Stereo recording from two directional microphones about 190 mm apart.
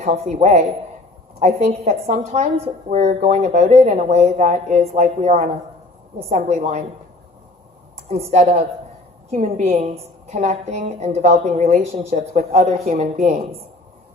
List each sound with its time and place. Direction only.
0.0 s a woman's voice: 35° right (ahead or behind)
8.1 s a woman's voice: 35° right (ahead or behind)